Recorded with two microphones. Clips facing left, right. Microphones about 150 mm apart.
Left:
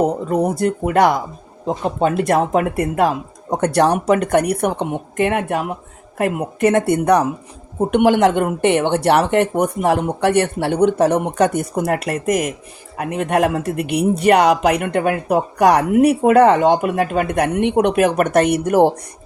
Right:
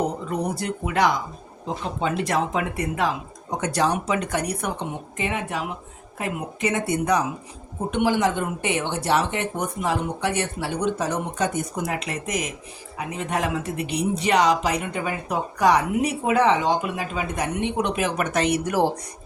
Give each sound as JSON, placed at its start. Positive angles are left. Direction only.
{"t": 0.3, "sound": "speech", "side_deg": 50}